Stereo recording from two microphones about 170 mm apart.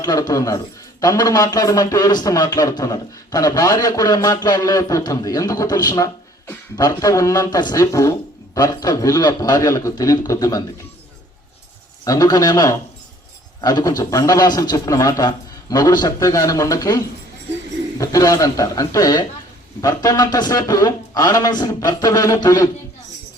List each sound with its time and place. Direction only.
0.0 s a man's voice: 20° left (ahead or behind)
12.0 s a man's voice: 20° left (ahead or behind)